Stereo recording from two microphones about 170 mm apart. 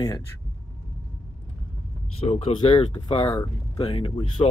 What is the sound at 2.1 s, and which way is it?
Speech, 35° left (ahead or behind).